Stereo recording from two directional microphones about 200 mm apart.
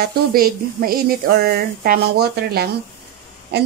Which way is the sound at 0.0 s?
45° right (ahead or behind).